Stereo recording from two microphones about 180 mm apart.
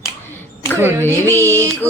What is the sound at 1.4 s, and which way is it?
Music, 15° right (ahead or behind).